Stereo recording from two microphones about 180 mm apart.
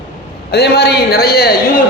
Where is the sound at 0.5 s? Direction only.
65° left (ahead or behind).